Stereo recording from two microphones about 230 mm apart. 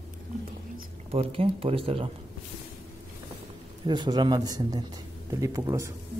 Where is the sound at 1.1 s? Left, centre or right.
Right.